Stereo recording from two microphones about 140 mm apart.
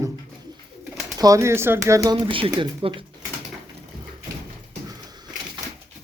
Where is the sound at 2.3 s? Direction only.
40° right (ahead or behind).